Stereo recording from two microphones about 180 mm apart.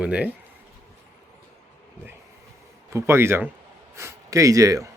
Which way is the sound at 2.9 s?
15° right (ahead or behind).